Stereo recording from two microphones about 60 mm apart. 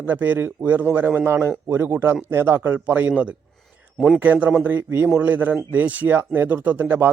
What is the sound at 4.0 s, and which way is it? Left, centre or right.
Speech, centre.